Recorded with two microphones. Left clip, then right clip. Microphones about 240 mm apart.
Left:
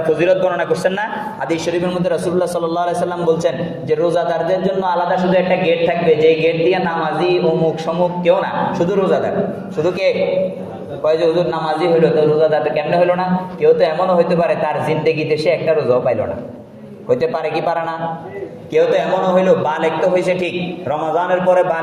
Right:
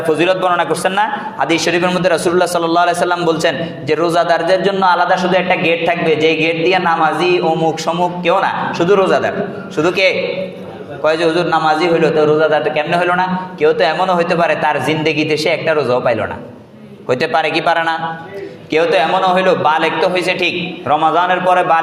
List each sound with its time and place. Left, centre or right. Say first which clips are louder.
0.2 s a man's voice: right 1 dB; right